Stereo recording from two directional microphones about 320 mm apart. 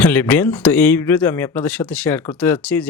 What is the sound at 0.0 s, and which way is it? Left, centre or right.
Speech, centre.